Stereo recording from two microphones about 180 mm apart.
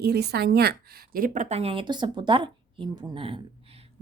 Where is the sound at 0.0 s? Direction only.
65° right (ahead or behind).